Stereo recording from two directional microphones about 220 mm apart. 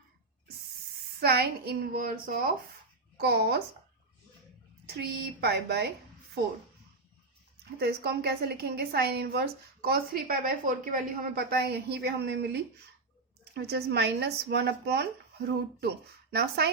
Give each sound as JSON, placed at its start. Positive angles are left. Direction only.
{"t": 1.2, "sound": "a woman's voice", "side_deg": -45}
{"t": 4.9, "sound": "a woman's voice", "side_deg": -45}
{"t": 7.8, "sound": "a woman's voice", "side_deg": -45}